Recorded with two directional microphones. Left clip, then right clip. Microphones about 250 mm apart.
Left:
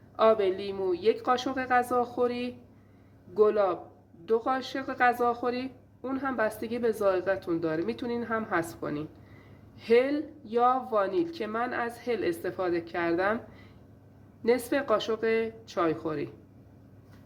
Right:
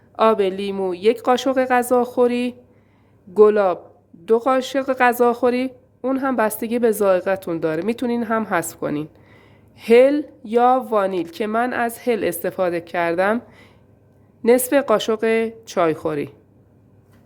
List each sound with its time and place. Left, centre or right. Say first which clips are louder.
0.2 s a woman's voice: right 7 dB; right